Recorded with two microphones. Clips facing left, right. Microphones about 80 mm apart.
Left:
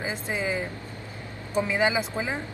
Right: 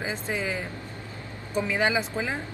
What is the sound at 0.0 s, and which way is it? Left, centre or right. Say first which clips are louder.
Speech: left 1 dB; left.